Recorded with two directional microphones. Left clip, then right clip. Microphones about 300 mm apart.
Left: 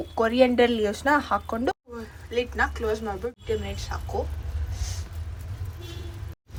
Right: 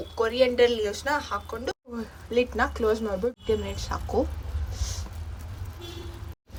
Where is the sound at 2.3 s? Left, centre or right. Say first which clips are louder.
Right 1 dB; right.